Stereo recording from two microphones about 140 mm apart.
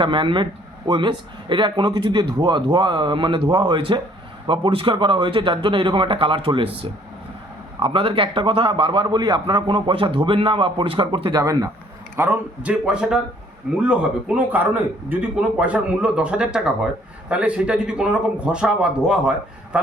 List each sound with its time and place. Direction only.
0.0 s a man's voice: 35° right (ahead or behind)
12.1 s a man's voice: 15° right (ahead or behind)